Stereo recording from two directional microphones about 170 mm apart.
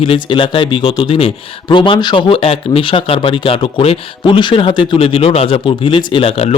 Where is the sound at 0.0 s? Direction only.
30° left (ahead or behind).